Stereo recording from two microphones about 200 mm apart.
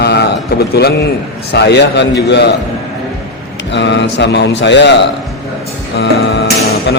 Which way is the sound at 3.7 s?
60° left (ahead or behind).